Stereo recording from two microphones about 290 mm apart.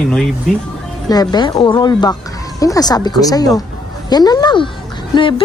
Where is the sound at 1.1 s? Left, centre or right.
Centre.